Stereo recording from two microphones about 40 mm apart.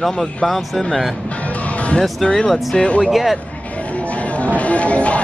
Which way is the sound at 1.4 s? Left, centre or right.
Left.